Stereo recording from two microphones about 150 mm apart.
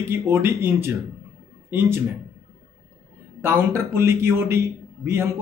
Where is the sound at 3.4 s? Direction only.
15° right (ahead or behind).